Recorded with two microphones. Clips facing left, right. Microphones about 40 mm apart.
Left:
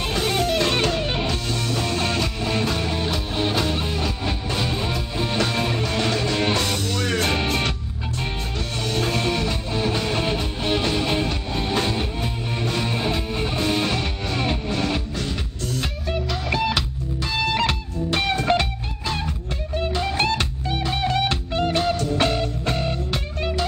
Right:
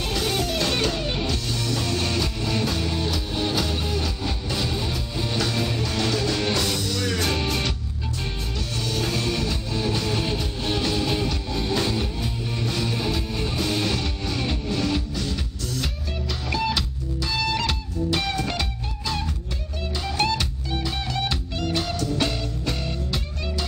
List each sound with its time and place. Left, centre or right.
0.1 s music: left
8.8 s music: left
16.4 s music: centre
17.2 s music: left